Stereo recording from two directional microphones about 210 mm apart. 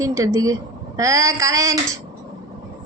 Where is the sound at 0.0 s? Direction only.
15° right (ahead or behind).